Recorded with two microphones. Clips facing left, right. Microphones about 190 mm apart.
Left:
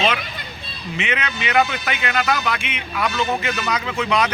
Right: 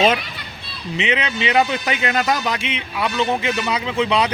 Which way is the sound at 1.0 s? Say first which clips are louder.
Right 4 dB; 25° right (ahead or behind).